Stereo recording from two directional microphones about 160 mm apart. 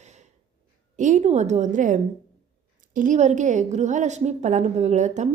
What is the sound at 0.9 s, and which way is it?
A woman's voice, 50° right (ahead or behind).